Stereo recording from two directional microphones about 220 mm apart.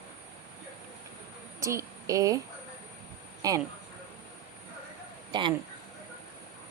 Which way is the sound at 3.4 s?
15° right (ahead or behind).